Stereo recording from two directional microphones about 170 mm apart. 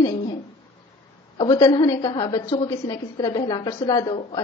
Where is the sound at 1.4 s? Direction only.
20° left (ahead or behind).